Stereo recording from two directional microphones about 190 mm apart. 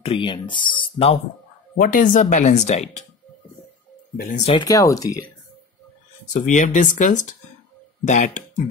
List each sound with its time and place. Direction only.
0.0 s speech: 30° left (ahead or behind)
1.8 s speech: 45° left (ahead or behind)
4.2 s speech: 40° left (ahead or behind)
4.6 s speech: 20° left (ahead or behind)
6.3 s speech: 40° left (ahead or behind)